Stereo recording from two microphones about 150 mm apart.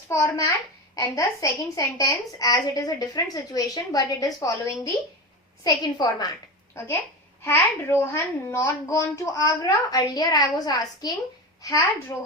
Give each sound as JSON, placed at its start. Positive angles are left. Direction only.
{"t": 0.1, "sound": "a woman's voice", "side_deg": 20}
{"t": 7.4, "sound": "a woman's voice", "side_deg": 15}